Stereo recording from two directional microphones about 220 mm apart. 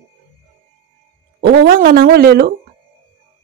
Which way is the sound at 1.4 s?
45° right (ahead or behind).